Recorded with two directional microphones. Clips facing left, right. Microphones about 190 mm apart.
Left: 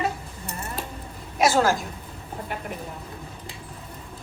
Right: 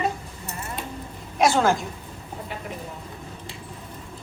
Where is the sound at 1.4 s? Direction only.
Centre (ahead or behind).